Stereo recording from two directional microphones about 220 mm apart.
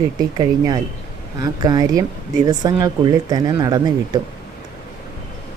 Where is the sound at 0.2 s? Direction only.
20° right (ahead or behind).